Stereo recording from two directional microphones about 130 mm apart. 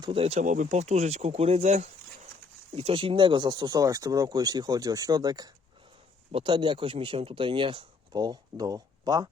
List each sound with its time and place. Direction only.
0.0 s speech: 45° right (ahead or behind)
2.7 s speech: 45° right (ahead or behind); by 9.3 s 30° right (ahead or behind)